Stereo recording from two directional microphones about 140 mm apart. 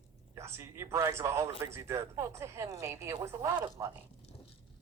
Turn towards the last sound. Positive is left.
turn(degrees=-20)  # may be behind; listen again after turning